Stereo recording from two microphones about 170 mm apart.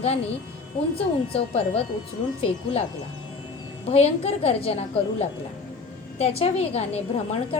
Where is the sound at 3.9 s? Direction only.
40° left (ahead or behind).